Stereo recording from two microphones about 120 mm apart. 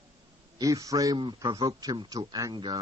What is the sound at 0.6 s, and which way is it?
Speech, 30° right (ahead or behind).